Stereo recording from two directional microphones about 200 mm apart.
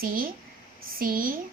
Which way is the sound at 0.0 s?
45° right (ahead or behind).